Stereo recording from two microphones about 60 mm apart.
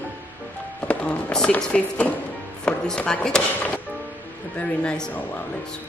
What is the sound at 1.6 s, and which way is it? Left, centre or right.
A woman's voice, centre.